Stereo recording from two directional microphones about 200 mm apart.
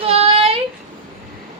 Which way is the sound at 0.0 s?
30° right (ahead or behind).